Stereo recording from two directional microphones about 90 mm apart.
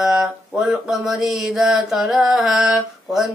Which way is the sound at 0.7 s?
Centre (ahead or behind).